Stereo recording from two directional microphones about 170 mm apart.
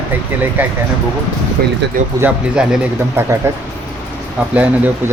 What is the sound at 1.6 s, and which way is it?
Speech, 65° right (ahead or behind).